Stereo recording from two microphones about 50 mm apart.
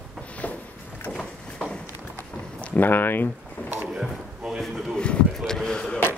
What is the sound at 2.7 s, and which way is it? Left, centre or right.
Speech, left.